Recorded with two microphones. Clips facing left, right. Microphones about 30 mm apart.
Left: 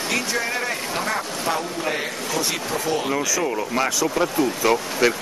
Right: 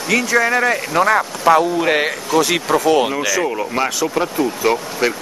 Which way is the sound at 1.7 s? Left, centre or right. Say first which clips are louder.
Right 9 dB; right.